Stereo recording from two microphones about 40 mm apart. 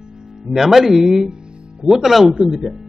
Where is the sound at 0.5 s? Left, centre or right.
Centre.